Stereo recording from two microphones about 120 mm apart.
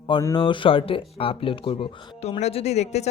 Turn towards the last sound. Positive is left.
turn(degrees=65)  # may be behind; listen again after turning